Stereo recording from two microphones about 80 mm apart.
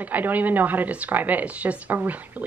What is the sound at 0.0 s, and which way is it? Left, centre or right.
Speech, right.